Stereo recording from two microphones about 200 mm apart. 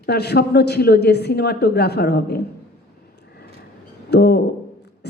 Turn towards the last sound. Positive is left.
turn(degrees=55)  # may be behind; listen again after turning